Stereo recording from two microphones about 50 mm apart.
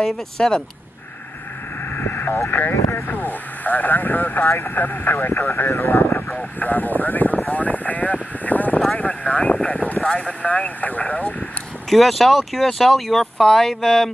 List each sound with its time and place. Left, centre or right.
0.0 s speech: centre
2.0 s vehicle: left
2.5 s speech: left
6.6 s speech: left
11.9 s speech: centre